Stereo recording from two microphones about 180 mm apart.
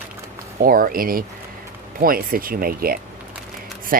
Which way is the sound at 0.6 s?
50° right (ahead or behind).